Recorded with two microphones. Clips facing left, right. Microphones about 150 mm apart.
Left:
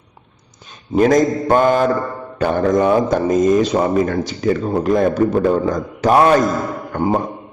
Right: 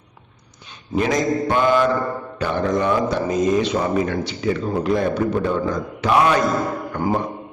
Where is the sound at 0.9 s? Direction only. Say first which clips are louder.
Left 6 dB; 45° left (ahead or behind).